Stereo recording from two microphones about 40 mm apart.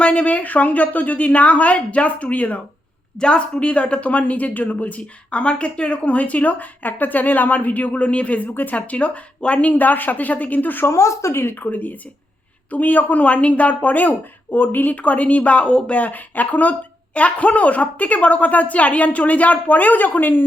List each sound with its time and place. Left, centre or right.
0.0 s speech: left
3.2 s speech: left
9.6 s speech: left
10.8 s a woman's voice: left
14.9 s speech: left